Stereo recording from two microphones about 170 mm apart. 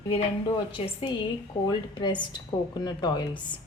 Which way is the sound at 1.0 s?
30° left (ahead or behind).